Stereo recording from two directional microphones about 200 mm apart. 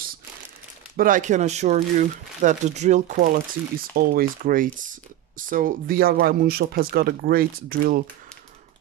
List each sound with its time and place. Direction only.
0.9 s speech: 40° right (ahead or behind)
3.2 s speech: 45° right (ahead or behind)